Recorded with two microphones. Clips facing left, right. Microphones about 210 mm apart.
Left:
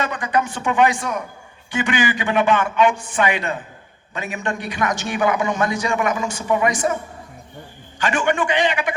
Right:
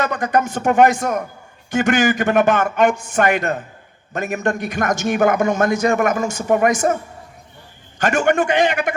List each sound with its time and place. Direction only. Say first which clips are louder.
0.0 s a man's voice: right 3 dB; 45° right (ahead or behind)